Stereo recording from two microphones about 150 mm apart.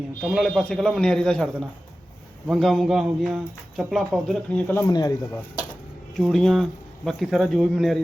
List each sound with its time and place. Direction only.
0.2 s speech: centre (ahead or behind)
4.9 s speech: 25° left (ahead or behind)
6.1 s speech: centre (ahead or behind)